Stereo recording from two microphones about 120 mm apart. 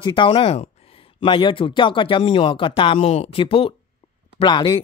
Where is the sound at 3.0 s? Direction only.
65° left (ahead or behind).